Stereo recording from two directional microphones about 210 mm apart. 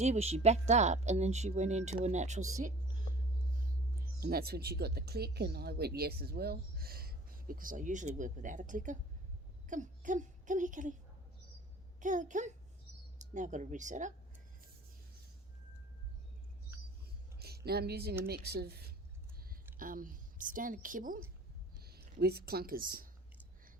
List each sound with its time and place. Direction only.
0.0 s speech: 30° right (ahead or behind)
2.6 s a sound: 35° right (ahead or behind)
4.2 s a woman's voice: 45° right (ahead or behind)
11.9 s speech: 35° right (ahead or behind)
17.4 s a woman's voice: 50° right (ahead or behind)